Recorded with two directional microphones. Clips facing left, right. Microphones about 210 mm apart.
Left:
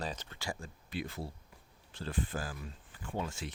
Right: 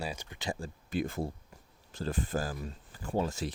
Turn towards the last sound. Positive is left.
turn(degrees=-40)  # may be behind; listen again after turning